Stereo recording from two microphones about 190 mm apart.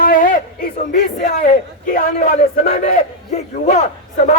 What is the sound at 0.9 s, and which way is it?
A man's voice, 40° left (ahead or behind).